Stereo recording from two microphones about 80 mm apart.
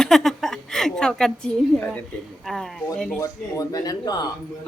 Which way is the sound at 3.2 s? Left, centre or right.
Left.